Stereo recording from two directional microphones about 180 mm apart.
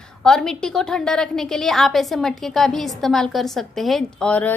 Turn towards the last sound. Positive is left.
turn(degrees=10)  # may be behind; listen again after turning